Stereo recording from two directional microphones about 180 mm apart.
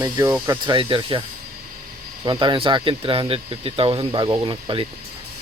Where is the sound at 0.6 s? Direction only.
25° right (ahead or behind).